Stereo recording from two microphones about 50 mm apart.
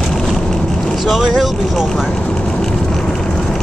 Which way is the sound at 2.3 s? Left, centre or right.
Centre.